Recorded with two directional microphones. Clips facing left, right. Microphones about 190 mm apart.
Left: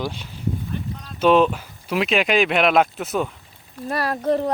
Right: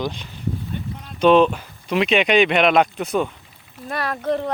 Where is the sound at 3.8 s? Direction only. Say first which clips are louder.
Left 2 dB; 35° left (ahead or behind).